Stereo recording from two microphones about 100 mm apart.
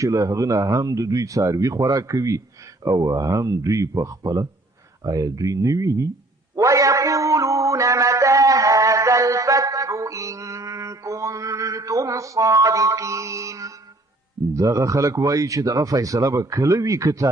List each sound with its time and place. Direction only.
0.0 s speech: 35° right (ahead or behind)
6.6 s a sound: 35° right (ahead or behind)
14.5 s speech: 30° right (ahead or behind)